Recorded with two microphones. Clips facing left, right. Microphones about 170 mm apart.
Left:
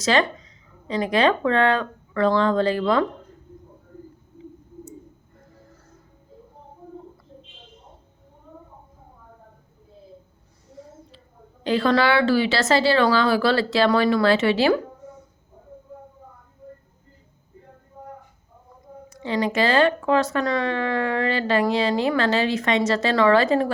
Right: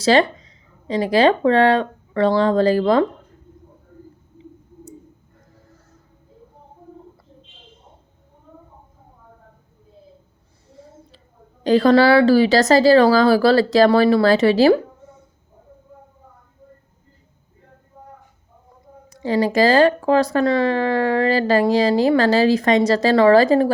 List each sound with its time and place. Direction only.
0.0 s speech: 35° right (ahead or behind)
11.6 s speech: 40° right (ahead or behind)
19.1 s speech: 35° right (ahead or behind)